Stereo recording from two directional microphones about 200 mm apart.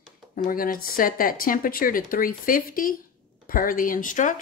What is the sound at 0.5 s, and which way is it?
Speech, 45° left (ahead or behind).